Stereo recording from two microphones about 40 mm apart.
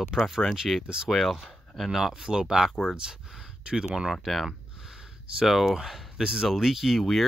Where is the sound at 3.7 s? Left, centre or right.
Centre.